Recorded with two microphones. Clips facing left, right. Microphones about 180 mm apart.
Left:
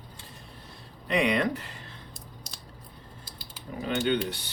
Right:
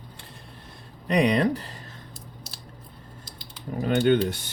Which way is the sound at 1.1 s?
40° right (ahead or behind).